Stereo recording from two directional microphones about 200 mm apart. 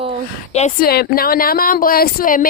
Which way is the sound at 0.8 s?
50° left (ahead or behind).